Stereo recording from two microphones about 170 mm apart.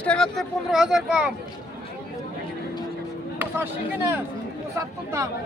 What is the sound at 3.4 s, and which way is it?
Speech, 15° right (ahead or behind).